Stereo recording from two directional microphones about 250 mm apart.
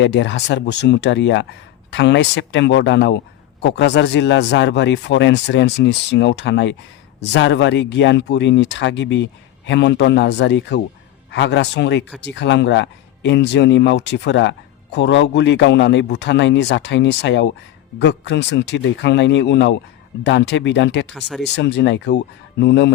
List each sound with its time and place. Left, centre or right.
0.0 s speech: left
21.1 s speech: centre
21.4 s speech: left